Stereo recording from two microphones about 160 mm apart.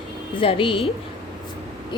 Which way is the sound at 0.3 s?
35° left (ahead or behind).